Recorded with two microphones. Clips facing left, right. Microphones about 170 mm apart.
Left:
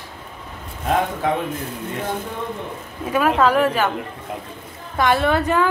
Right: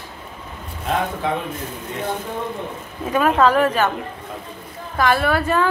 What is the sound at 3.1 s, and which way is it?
Speech, 5° left (ahead or behind).